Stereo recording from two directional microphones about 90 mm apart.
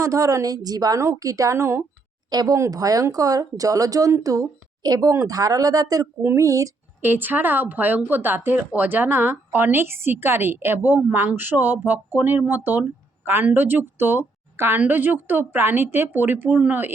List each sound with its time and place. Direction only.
0.0 s speech: 35° right (ahead or behind)
2.3 s speech: 45° right (ahead or behind)
7.0 s speech: 20° right (ahead or behind)